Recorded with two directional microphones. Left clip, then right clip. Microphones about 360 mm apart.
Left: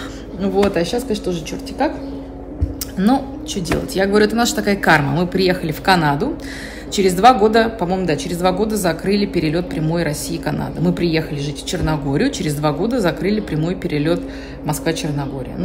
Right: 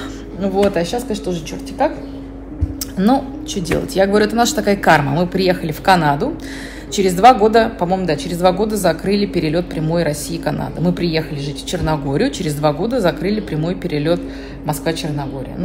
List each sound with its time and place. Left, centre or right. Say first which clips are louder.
0.4 s a woman's voice: right 1 dB; centre
3.0 s a woman's voice: right 2 dB; centre